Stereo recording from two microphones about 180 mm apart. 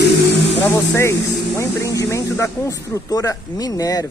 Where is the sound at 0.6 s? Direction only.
15° left (ahead or behind).